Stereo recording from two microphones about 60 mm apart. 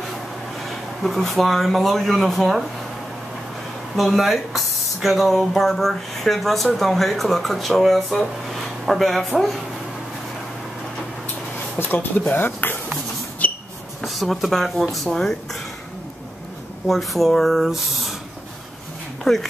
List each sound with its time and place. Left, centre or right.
0.7 s speech: centre
3.9 s speech: centre
11.8 s speech: left
13.4 s a sound: left
14.0 s speech: centre
16.8 s speech: centre
19.3 s speech: centre